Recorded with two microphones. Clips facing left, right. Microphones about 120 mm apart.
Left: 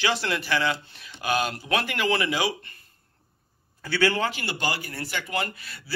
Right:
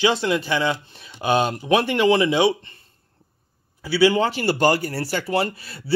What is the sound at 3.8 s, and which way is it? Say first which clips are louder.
Speech: right 7 dB; 10° right (ahead or behind).